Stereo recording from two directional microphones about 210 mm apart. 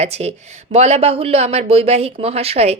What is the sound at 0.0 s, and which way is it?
Speech, 30° right (ahead or behind).